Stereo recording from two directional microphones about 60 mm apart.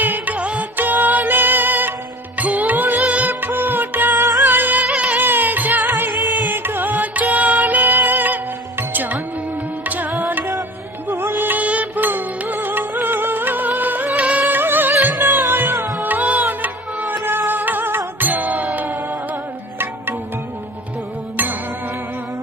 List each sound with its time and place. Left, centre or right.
0.0 s music: right
4.9 s music: centre
5.2 s music: right